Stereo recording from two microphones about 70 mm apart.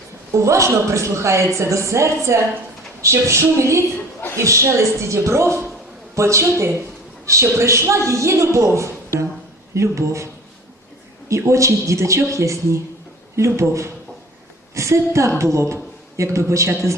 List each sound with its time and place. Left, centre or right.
0.3 s a woman's voice: right
11.3 s a woman's voice: right